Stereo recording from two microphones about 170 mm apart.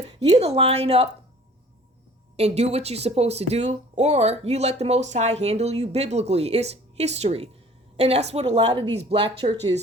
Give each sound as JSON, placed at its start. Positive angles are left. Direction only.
{"t": 0.3, "sound": "speech", "side_deg": -40}
{"t": 2.3, "sound": "speech", "side_deg": -40}